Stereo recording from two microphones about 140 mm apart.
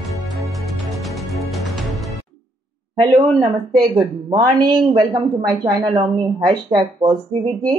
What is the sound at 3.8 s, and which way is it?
A woman's voice, 25° right (ahead or behind).